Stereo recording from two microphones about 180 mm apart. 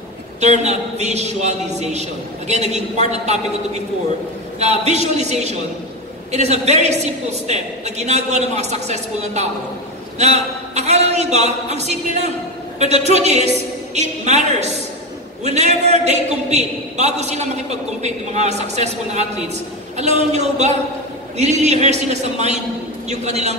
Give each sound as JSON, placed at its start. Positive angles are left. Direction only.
{"t": 0.4, "sound": "a man's voice", "side_deg": -40}
{"t": 4.6, "sound": "a man's voice", "side_deg": -40}